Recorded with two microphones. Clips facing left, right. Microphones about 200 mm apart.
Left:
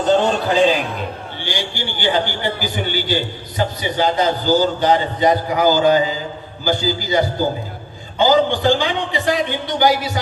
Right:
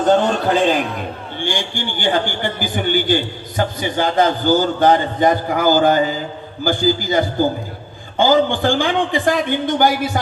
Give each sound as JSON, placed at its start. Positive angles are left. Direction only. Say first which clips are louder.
{"t": 0.1, "sound": "a man's voice", "louder": "even", "side_deg": -50}